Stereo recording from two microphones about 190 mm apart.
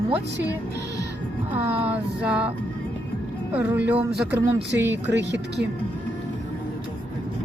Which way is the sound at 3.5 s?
15° right (ahead or behind).